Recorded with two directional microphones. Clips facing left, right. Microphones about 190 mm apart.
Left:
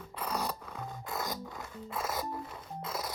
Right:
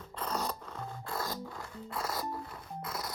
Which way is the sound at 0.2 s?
10° left (ahead or behind).